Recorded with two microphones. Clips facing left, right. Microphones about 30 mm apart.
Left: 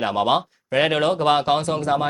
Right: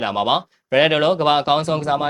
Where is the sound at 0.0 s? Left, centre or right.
Centre.